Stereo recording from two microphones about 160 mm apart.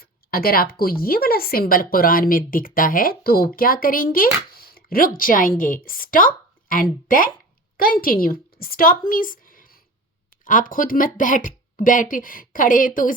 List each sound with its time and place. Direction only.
0.0 s a woman's voice: 70° left (ahead or behind)